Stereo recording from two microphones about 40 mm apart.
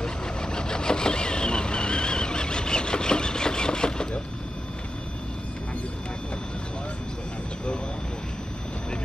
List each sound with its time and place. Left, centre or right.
0.0 s vehicle: centre